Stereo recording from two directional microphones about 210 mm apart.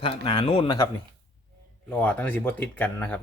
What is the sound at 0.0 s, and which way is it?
Speech, 25° left (ahead or behind).